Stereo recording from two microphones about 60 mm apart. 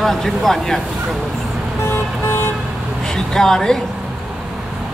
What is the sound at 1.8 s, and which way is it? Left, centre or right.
Vehicle, left.